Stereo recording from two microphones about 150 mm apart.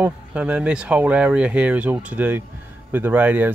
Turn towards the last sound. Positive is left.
turn(degrees=-10)  # may be behind; listen again after turning